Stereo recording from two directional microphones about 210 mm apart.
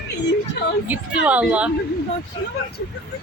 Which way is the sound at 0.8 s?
5° right (ahead or behind).